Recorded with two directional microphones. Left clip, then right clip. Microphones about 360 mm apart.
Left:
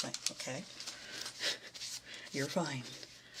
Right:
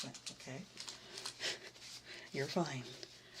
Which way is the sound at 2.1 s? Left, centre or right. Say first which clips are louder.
Left 1 dB; centre.